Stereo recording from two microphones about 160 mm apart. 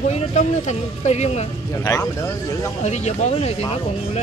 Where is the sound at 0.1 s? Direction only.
45° left (ahead or behind).